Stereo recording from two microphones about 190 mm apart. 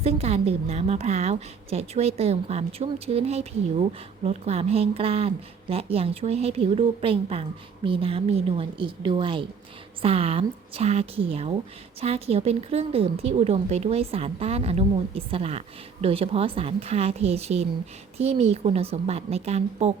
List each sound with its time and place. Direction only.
0.0 s a woman's voice: 35° right (ahead or behind)